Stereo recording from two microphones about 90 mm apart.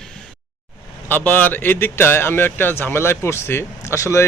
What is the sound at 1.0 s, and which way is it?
Speech, 20° left (ahead or behind).